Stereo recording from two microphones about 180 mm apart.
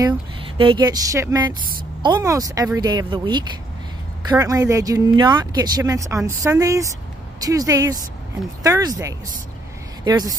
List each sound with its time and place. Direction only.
0.0 s speech: 30° right (ahead or behind)